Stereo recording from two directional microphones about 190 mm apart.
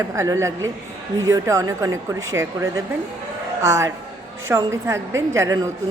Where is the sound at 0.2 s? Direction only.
15° right (ahead or behind).